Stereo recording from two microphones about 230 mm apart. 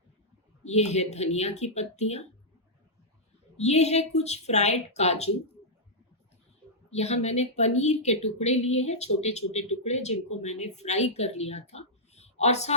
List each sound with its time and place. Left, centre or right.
0.6 s speech: left
3.6 s speech: left
6.9 s a woman's voice: left